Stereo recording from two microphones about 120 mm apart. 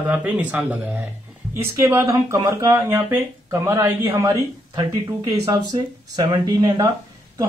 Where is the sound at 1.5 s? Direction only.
25° right (ahead or behind).